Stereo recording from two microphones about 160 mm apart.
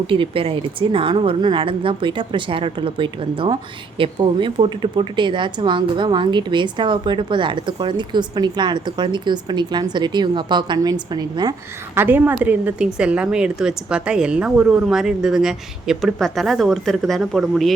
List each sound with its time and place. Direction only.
0.1 s a woman's voice: 35° right (ahead or behind)
11.9 s a woman's voice: 10° right (ahead or behind)